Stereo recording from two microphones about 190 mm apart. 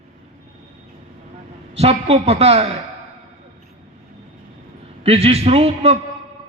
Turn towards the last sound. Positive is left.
turn(degrees=-35)  # may be behind; listen again after turning